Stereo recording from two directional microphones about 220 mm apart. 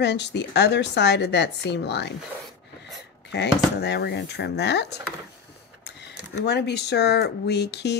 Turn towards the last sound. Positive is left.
turn(degrees=50)  # may be behind; listen again after turning